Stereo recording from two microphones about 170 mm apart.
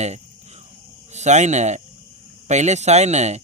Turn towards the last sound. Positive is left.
turn(degrees=-40)  # may be behind; listen again after turning